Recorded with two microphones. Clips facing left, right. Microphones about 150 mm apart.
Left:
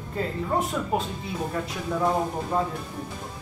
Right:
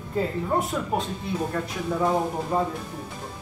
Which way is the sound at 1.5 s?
Centre (ahead or behind).